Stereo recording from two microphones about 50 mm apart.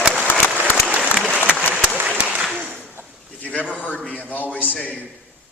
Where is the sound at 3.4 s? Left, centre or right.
Left.